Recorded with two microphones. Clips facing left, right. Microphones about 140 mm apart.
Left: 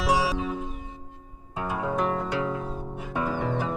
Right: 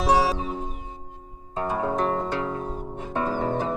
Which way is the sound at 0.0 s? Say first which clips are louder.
Right 3 dB; 40° right (ahead or behind).